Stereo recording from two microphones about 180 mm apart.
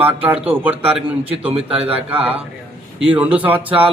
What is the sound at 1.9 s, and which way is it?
A man's voice, 10° right (ahead or behind).